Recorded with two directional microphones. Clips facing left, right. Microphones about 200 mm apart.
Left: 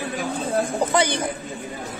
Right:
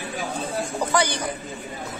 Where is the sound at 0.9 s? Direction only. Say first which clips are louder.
Left 1 dB; 20° left (ahead or behind).